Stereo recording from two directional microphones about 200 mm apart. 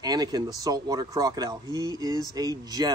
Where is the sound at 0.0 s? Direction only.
20° right (ahead or behind).